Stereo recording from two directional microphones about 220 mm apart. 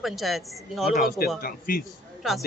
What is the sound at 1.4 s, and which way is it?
Speech, 40° left (ahead or behind).